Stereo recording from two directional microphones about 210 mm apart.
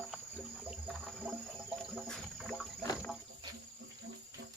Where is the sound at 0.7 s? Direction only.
5° right (ahead or behind).